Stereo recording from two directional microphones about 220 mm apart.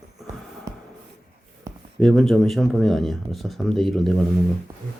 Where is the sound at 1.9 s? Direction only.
Centre (ahead or behind).